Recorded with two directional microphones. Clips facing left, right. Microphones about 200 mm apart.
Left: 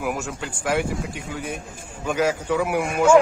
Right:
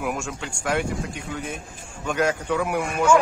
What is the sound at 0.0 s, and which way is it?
A man's voice, 5° left (ahead or behind).